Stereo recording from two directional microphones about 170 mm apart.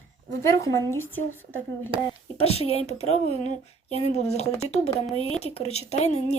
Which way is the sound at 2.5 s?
35° left (ahead or behind).